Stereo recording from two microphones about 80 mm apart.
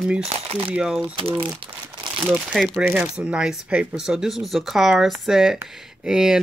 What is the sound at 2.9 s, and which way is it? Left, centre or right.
Speech, centre.